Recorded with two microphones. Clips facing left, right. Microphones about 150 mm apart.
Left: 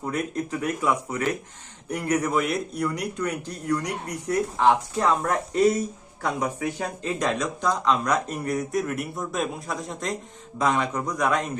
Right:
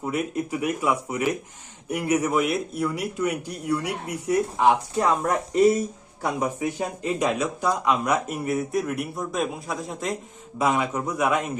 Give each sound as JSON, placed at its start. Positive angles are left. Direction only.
{"t": 0.0, "sound": "a man's voice", "side_deg": -10}